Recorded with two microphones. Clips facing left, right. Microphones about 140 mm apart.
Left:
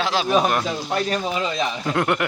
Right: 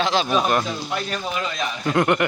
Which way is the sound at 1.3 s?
25° left (ahead or behind).